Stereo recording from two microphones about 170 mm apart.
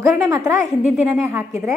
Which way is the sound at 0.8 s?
10° right (ahead or behind).